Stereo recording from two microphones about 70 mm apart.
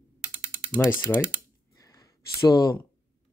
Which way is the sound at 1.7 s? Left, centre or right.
Left.